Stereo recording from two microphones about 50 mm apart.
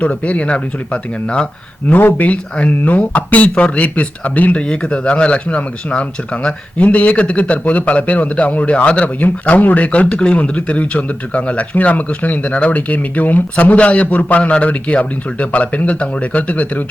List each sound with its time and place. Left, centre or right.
0.0 s speech: left
2.0 s speech: left
4.6 s speech: centre